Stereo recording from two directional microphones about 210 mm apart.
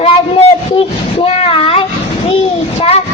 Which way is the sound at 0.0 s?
25° left (ahead or behind).